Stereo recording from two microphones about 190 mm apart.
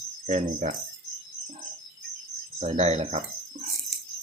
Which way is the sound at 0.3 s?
40° right (ahead or behind).